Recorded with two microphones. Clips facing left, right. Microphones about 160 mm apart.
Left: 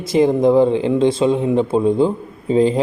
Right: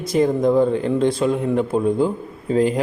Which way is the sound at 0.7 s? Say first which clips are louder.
Left 3 dB; 90° left.